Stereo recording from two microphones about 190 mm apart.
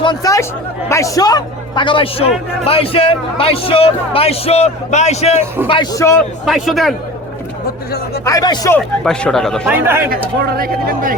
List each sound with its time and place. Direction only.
0.0 s a man's voice: 20° left (ahead or behind)
5.6 s a man's voice: 25° left (ahead or behind)
6.4 s speech: centre (ahead or behind)
8.2 s speech: 20° left (ahead or behind)
9.0 s speech: centre (ahead or behind)
9.6 s speech: 10° right (ahead or behind)
10.1 s speech: 50° right (ahead or behind)